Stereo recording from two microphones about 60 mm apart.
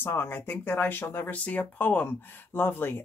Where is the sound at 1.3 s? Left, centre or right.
Left.